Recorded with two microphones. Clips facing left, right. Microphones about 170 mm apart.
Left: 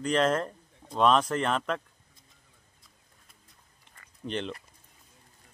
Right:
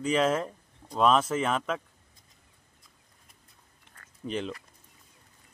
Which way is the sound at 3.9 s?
5° right (ahead or behind).